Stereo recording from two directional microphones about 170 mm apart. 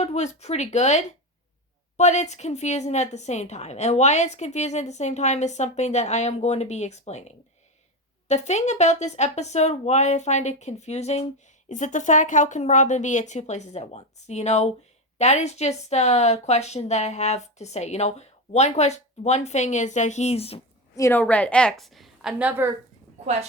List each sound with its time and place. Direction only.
0.0 s a woman's voice: 40° left (ahead or behind)
20.9 s a woman's voice: 15° left (ahead or behind); by 22.7 s 10° right (ahead or behind)